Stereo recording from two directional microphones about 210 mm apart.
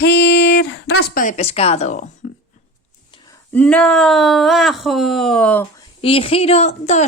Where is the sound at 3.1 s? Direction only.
20° left (ahead or behind).